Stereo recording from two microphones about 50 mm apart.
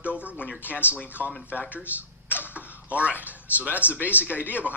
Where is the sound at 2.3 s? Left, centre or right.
Left.